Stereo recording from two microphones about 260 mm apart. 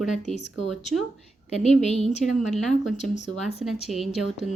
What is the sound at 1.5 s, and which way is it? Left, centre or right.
Speech, left.